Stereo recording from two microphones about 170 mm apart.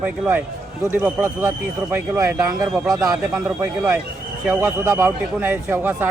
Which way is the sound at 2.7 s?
Centre (ahead or behind).